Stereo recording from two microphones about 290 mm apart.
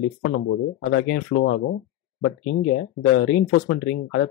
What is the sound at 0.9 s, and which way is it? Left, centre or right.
Speech, left.